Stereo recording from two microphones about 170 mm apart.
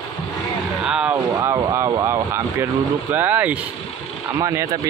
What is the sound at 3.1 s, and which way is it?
Speech, 10° right (ahead or behind).